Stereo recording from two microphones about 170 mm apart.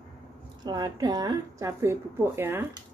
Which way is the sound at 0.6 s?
25° right (ahead or behind).